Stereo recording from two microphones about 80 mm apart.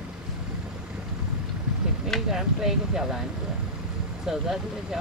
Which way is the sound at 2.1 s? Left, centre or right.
Centre.